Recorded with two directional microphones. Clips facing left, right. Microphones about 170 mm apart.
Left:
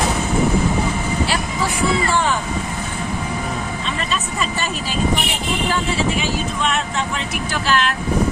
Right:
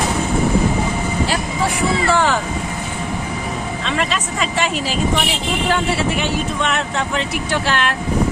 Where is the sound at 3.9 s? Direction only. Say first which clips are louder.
Right 6 dB; 90° right.